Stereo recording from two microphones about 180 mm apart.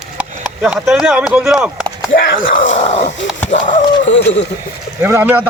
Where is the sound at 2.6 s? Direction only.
40° left (ahead or behind).